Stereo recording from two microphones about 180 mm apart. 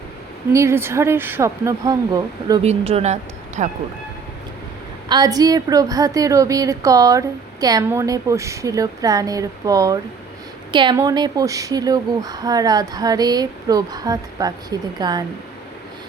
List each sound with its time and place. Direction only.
0.5 s speech: 15° right (ahead or behind)
2.6 s speech: 35° right (ahead or behind)
5.0 s a woman's voice: 20° right (ahead or behind)